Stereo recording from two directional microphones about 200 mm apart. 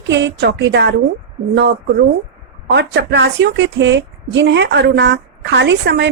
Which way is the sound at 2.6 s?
55° right (ahead or behind).